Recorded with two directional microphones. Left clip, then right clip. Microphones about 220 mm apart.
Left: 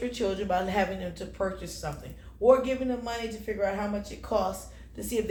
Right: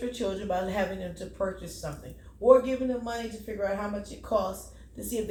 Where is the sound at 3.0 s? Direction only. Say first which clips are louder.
Left 1 dB; 30° left (ahead or behind).